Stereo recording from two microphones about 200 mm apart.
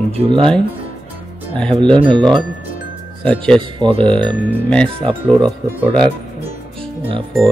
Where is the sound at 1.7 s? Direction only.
25° right (ahead or behind).